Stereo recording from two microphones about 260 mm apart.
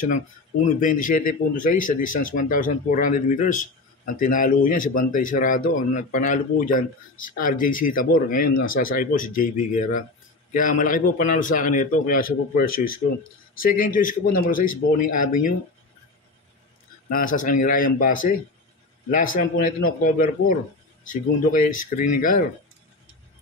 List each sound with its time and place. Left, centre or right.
0.0 s speech: left
17.1 s speech: left